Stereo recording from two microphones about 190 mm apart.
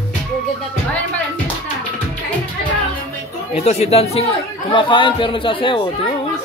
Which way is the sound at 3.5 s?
35° left (ahead or behind).